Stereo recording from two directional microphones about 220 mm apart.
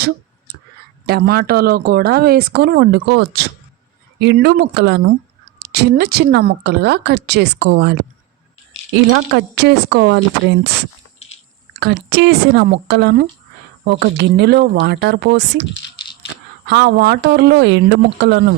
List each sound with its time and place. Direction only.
1.0 s speech: 45° right (ahead or behind)
9.0 s speech: 55° right (ahead or behind)
11.8 s speech: 50° right (ahead or behind)
16.6 s speech: 50° right (ahead or behind)